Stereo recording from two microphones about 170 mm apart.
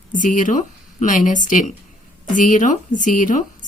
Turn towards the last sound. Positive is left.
turn(degrees=50)  # may be behind; listen again after turning